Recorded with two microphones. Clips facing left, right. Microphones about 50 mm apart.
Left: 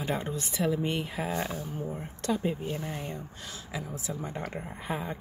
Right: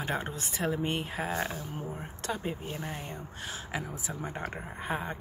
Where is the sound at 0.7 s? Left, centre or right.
Right.